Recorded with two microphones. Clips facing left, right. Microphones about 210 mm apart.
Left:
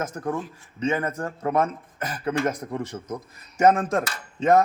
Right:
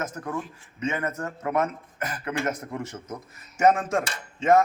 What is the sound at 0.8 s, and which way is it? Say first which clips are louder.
Speech: left 3 dB; 30° left (ahead or behind).